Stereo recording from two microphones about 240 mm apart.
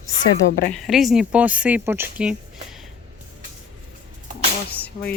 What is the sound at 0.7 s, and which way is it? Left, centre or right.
Speech, centre.